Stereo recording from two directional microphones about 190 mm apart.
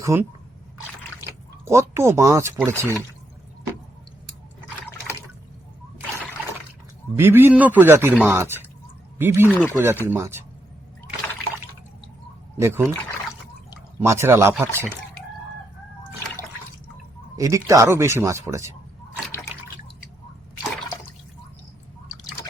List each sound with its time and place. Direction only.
0.0 s speech: 15° right (ahead or behind)
7.2 s speech: 10° right (ahead or behind)
9.5 s speech: 10° left (ahead or behind)
9.8 s speech: 10° right (ahead or behind)
12.5 s speech: 15° right (ahead or behind)
14.0 s speech: 15° right (ahead or behind)
17.3 s speech: 15° right (ahead or behind)